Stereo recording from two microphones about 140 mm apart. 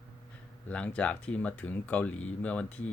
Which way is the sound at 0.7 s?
10° left (ahead or behind).